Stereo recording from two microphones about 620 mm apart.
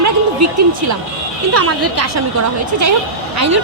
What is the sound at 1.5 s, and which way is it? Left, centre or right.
Speech, right.